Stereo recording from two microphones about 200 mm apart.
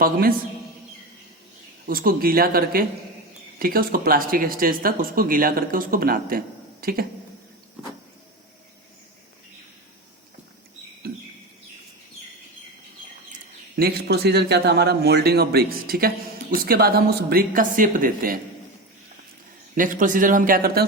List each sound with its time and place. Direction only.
0.0 s speech: 45° right (ahead or behind)
1.9 s speech: 45° right (ahead or behind)
13.7 s speech: 50° right (ahead or behind)
19.7 s speech: 40° right (ahead or behind)